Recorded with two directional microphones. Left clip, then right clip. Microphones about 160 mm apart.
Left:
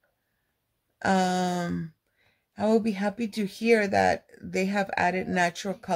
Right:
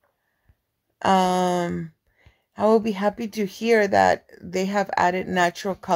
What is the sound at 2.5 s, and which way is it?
Speech, 15° right (ahead or behind).